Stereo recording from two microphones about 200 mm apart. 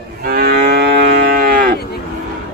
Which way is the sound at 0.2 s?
50° right (ahead or behind).